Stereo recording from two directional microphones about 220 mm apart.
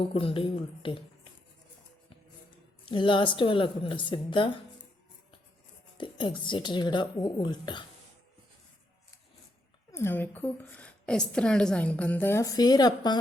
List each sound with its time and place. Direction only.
0.0 s a woman's voice: 25° left (ahead or behind)
2.8 s a woman's voice: 20° left (ahead or behind)
6.0 s a woman's voice: 20° left (ahead or behind)
9.9 s a woman's voice: 10° left (ahead or behind)